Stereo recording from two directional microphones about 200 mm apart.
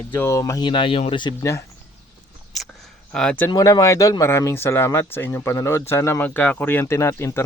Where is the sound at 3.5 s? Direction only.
15° left (ahead or behind).